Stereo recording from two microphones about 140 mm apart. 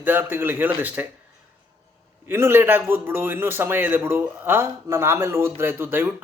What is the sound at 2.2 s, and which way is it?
A man's voice, 15° right (ahead or behind).